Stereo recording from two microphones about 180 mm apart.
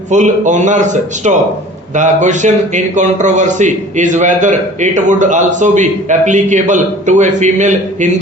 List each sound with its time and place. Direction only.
0.1 s a man's voice: 40° right (ahead or behind)